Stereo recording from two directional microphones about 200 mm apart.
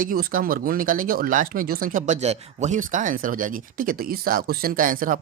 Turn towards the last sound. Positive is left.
turn(degrees=-40)  # may be behind; listen again after turning